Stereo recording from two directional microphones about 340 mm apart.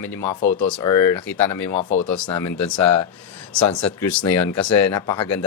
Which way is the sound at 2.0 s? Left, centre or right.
Left.